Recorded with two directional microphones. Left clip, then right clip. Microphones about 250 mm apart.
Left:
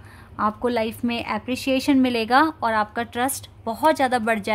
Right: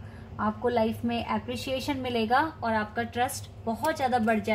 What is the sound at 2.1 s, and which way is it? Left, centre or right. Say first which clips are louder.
A woman's voice: left 3 dB; left.